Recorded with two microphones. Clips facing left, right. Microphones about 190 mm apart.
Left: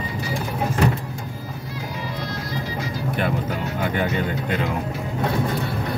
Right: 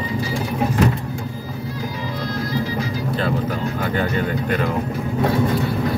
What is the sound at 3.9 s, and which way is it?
Speech, 20° left (ahead or behind).